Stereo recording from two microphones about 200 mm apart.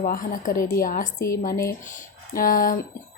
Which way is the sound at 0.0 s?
45° left (ahead or behind).